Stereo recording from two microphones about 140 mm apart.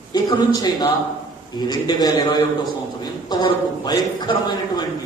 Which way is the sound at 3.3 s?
30° left (ahead or behind).